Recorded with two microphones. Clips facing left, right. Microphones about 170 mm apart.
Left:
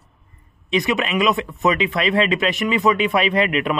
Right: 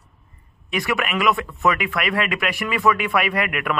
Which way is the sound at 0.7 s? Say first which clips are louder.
Left 3 dB; 20° left (ahead or behind).